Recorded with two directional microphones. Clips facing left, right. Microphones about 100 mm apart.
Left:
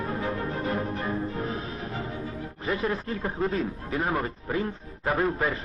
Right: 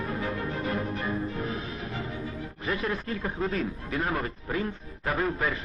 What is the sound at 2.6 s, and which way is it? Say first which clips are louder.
A man's voice: left 2 dB; 30° left (ahead or behind).